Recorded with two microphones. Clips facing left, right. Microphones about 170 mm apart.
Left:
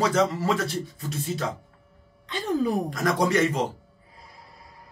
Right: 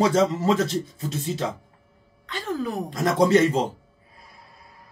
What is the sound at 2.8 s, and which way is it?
Speech, 25° right (ahead or behind).